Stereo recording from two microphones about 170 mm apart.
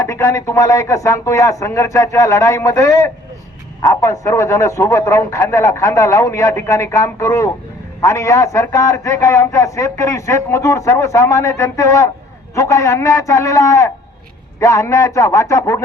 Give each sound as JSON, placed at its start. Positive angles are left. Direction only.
{"t": 0.0, "sound": "a man's voice", "side_deg": 15}